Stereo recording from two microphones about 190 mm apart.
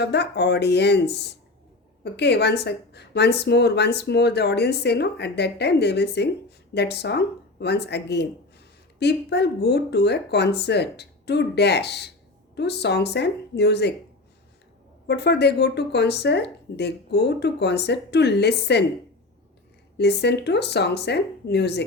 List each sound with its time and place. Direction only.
0.0 s a woman's voice: 60° left (ahead or behind)
15.0 s a woman's voice: 60° left (ahead or behind)
20.0 s a woman's voice: 60° left (ahead or behind)